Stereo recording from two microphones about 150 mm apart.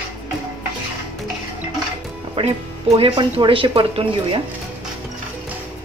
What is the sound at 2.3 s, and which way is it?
A woman's voice, 40° right (ahead or behind).